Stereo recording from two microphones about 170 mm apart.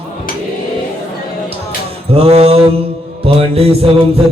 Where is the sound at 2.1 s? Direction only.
35° right (ahead or behind).